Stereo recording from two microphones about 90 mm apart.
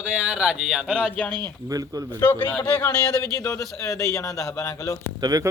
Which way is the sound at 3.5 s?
35° left (ahead or behind).